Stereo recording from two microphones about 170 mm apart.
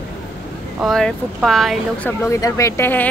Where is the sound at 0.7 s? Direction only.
Centre (ahead or behind).